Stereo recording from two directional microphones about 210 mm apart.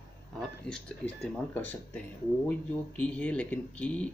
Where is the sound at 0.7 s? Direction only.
5° left (ahead or behind).